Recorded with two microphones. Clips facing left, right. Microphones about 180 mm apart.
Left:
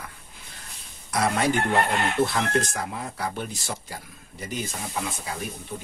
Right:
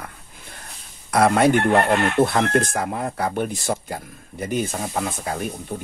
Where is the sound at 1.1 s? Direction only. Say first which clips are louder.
Right 7 dB; 55° right (ahead or behind).